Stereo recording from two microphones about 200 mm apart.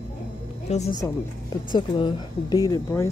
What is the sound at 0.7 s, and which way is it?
Speech, 35° left (ahead or behind).